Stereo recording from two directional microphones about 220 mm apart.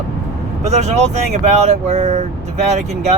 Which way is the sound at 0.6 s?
30° right (ahead or behind).